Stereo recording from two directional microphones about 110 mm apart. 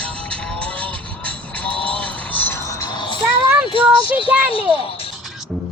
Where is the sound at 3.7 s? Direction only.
55° left (ahead or behind).